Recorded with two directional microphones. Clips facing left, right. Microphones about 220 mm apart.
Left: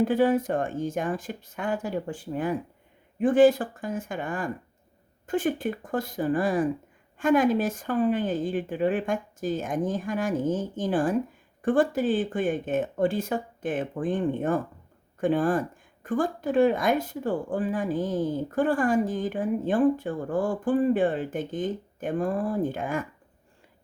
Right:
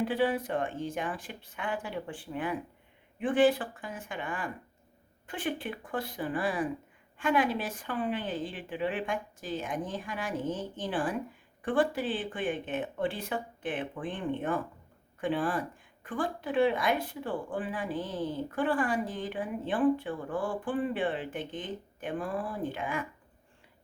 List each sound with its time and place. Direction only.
0.0 s speech: 45° left (ahead or behind)